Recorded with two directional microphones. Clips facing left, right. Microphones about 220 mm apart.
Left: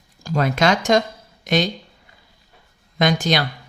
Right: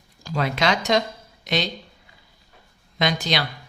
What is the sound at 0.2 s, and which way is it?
A woman's voice, 45° left (ahead or behind).